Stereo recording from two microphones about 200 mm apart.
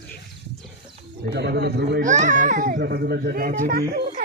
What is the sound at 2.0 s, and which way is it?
A child's voice, 40° right (ahead or behind).